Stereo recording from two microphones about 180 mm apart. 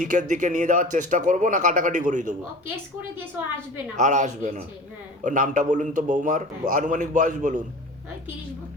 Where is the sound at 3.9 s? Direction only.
40° right (ahead or behind).